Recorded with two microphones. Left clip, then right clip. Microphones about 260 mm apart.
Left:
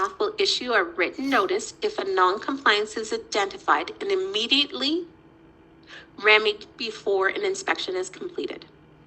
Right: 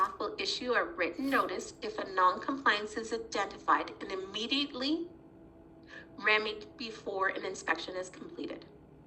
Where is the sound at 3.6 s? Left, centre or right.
Centre.